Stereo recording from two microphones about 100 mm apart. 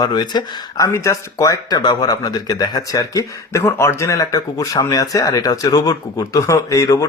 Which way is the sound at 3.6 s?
25° left (ahead or behind).